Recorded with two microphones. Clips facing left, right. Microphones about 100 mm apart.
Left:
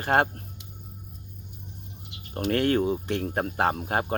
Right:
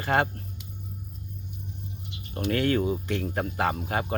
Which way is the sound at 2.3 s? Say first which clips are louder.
Left 2 dB; 50° left (ahead or behind).